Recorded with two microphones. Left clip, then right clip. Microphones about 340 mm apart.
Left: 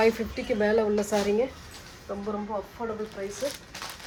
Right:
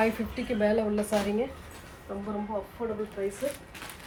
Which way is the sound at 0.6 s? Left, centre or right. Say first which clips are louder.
Left 2 dB; left.